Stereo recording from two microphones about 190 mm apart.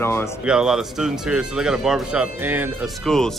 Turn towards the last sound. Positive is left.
turn(degrees=5)  # may be behind; listen again after turning